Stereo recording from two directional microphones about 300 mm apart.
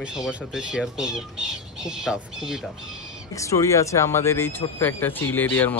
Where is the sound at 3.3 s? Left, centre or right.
Centre.